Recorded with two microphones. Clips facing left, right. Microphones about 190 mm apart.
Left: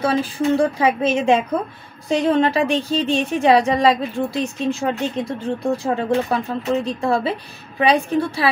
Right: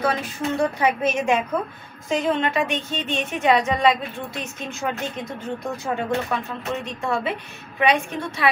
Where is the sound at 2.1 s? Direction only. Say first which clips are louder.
Left 5 dB; 35° left (ahead or behind).